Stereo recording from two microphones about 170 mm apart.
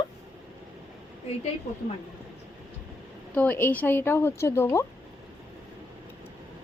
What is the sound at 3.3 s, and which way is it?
A woman's voice, 10° left (ahead or behind).